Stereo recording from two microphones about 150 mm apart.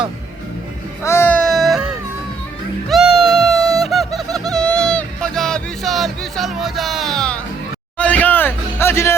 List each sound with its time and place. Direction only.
1.0 s music: 15° left (ahead or behind)
1.4 s baby cry: centre (ahead or behind)
2.9 s a sound: 5° right (ahead or behind)
7.9 s music: 10° left (ahead or behind)